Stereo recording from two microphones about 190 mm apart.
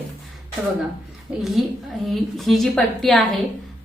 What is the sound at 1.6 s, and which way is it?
A woman's voice, centre (ahead or behind).